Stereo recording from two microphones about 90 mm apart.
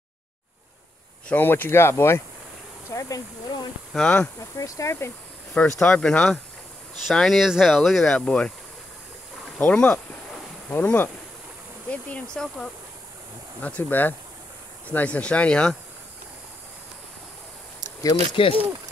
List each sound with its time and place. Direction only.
1.3 s speech: 20° left (ahead or behind)
2.9 s speech: 40° left (ahead or behind)
3.9 s speech: 10° left (ahead or behind)
4.4 s speech: 40° left (ahead or behind)
5.6 s speech: 15° left (ahead or behind)
9.6 s speech: 10° left (ahead or behind)
18.3 s speech: 75° left (ahead or behind)